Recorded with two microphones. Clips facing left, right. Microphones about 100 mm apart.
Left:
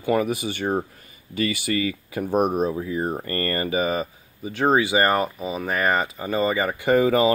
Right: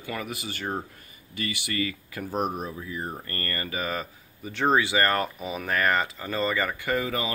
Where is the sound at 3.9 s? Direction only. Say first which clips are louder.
Left 6 dB; 10° left (ahead or behind).